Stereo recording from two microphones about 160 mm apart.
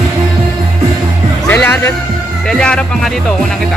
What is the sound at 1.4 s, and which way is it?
Music, 10° left (ahead or behind).